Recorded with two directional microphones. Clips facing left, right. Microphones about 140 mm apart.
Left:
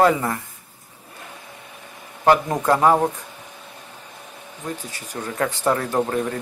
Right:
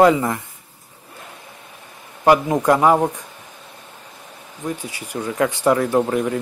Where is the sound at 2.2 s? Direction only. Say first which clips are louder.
Right 3 dB; 15° right (ahead or behind).